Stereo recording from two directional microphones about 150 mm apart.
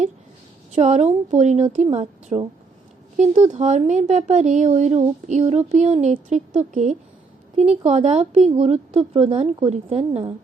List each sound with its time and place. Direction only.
0.7 s a woman's voice: 50° right (ahead or behind)